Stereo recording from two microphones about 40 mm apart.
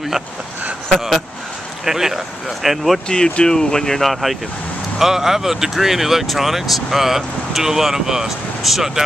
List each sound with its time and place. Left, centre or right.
1.9 s speech: centre
3.1 s speech: left
4.0 s speech: centre